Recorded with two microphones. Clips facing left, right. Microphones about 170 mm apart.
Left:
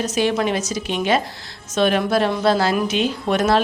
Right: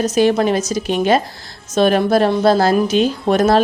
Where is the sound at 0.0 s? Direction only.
40° right (ahead or behind).